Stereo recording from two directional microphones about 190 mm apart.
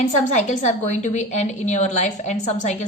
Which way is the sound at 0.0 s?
40° left (ahead or behind).